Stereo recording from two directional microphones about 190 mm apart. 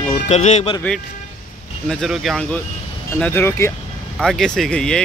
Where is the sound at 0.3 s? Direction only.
35° left (ahead or behind).